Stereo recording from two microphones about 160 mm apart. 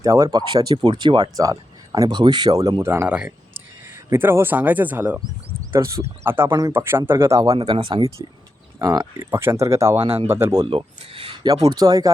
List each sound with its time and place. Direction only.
0.0 s speech: 20° right (ahead or behind)
7.5 s speech: 30° right (ahead or behind)
10.0 s speech: 35° right (ahead or behind)
10.2 s speech: 15° right (ahead or behind)
10.7 s speech: 35° right (ahead or behind)
11.4 s speech: 25° right (ahead or behind)